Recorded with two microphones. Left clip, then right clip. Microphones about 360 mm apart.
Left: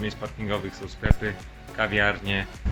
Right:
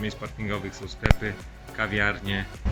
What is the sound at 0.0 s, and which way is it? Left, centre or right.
Speech, centre.